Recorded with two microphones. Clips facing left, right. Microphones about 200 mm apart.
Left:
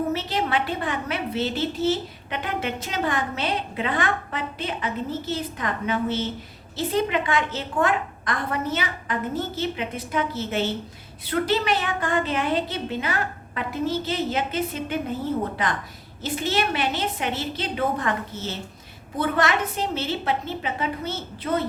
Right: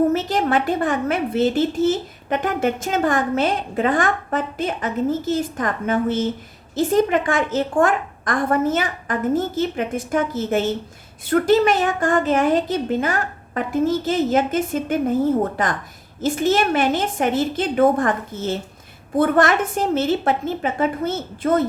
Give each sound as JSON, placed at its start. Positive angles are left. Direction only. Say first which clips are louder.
{"t": 0.1, "sound": "a woman's voice", "louder": "right 6 dB", "side_deg": -45}